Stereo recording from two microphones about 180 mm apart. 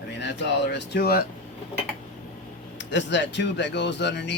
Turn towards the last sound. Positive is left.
turn(degrees=75)  # may be behind; listen again after turning